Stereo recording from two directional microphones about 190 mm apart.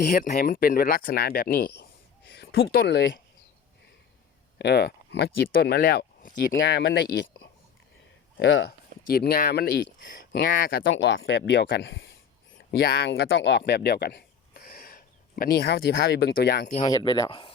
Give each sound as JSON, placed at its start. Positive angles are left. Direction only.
{"t": 0.2, "sound": "speech", "side_deg": 50}
{"t": 4.5, "sound": "speech", "side_deg": 60}
{"t": 6.7, "sound": "speech", "side_deg": 70}
{"t": 8.4, "sound": "speech", "side_deg": 70}
{"t": 9.0, "sound": "speech", "side_deg": 50}
{"t": 10.8, "sound": "speech", "side_deg": 75}
{"t": 12.5, "sound": "speech", "side_deg": 60}
{"t": 13.6, "sound": "speech", "side_deg": 60}
{"t": 16.9, "sound": "speech", "side_deg": 20}